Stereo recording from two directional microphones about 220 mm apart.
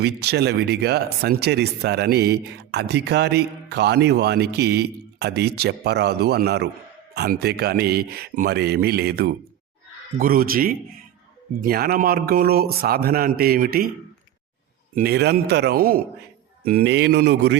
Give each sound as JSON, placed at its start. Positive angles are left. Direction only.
{"t": 0.0, "sound": "speech", "side_deg": -50}
{"t": 14.9, "sound": "speech", "side_deg": -45}